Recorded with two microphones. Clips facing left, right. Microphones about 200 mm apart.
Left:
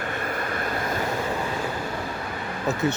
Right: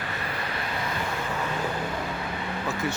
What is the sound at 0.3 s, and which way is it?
Vehicle, 50° left (ahead or behind).